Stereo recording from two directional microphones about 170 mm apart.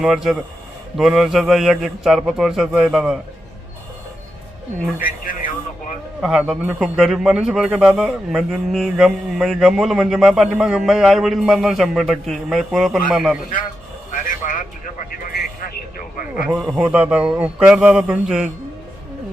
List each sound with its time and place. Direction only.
0.0 s a man's voice: centre (ahead or behind)
4.9 s speech: 55° left (ahead or behind)
6.2 s a man's voice: 5° right (ahead or behind)
14.1 s a sound: 50° left (ahead or behind)
15.2 s vehicle: 55° left (ahead or behind)
16.5 s speech: 5° right (ahead or behind)